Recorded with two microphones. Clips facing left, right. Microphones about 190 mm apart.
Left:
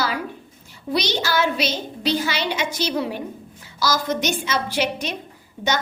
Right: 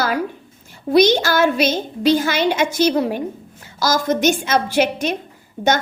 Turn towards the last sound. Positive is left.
turn(degrees=-50)  # may be behind; listen again after turning